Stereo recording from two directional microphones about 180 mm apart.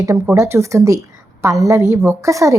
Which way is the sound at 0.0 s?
15° right (ahead or behind).